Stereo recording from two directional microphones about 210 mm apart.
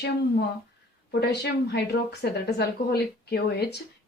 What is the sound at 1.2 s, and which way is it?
A woman's voice, 50° left (ahead or behind).